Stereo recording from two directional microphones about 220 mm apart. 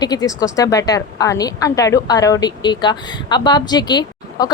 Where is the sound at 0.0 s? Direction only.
15° left (ahead or behind).